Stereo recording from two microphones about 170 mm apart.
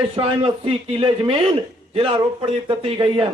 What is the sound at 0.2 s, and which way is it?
A man's voice, 30° right (ahead or behind).